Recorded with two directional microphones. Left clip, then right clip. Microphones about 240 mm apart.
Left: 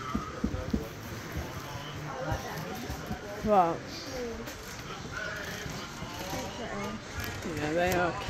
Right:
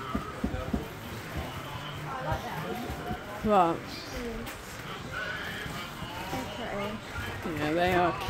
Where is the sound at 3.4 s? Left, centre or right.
Centre.